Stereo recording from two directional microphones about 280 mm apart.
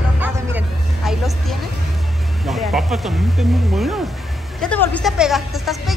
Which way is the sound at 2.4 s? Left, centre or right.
Centre.